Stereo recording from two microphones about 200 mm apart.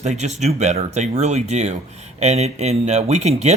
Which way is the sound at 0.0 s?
35° right (ahead or behind).